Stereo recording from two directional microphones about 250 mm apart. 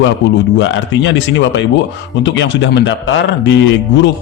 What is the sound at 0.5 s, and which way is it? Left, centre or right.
A man's voice, left.